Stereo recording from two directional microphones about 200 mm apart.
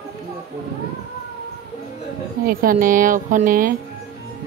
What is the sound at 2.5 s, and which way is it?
Speech, 45° right (ahead or behind).